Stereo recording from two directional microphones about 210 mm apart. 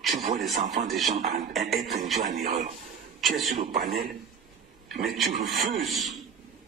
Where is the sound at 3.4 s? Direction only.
35° right (ahead or behind).